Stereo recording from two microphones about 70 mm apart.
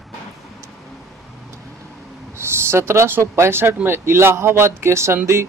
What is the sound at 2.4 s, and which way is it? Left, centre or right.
Speech, right.